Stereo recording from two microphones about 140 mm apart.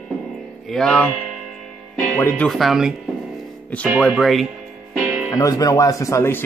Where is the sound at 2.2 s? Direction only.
15° left (ahead or behind).